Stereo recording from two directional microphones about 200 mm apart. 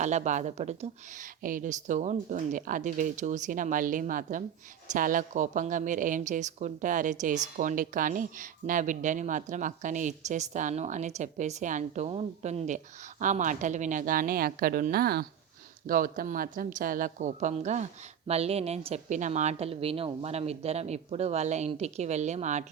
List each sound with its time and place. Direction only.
0.0 s a woman's voice: 35° right (ahead or behind)